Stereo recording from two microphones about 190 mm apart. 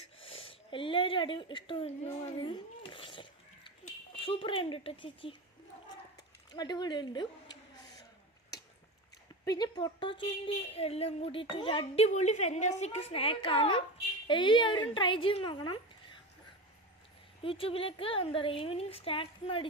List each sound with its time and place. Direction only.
0.2 s speech: 30° left (ahead or behind)
2.4 s a sound: 25° left (ahead or behind)
4.3 s speech: 30° left (ahead or behind)
6.5 s speech: 20° left (ahead or behind)
9.4 s a woman's voice: 20° left (ahead or behind)
17.4 s speech: 30° left (ahead or behind)